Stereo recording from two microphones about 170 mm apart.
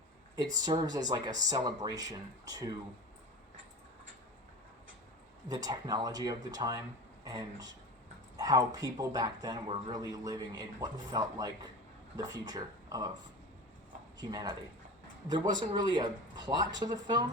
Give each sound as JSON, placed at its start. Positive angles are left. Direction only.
{"t": 0.6, "sound": "speech", "side_deg": -25}
{"t": 5.5, "sound": "speech", "side_deg": -20}
{"t": 14.2, "sound": "speech", "side_deg": -25}